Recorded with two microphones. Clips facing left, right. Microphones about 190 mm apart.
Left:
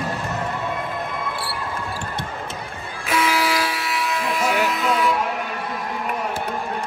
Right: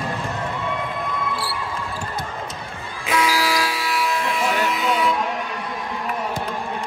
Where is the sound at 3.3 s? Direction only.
25° left (ahead or behind).